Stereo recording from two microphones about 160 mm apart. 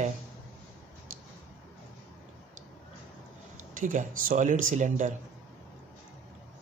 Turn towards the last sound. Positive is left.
turn(degrees=-50)  # may be behind; listen again after turning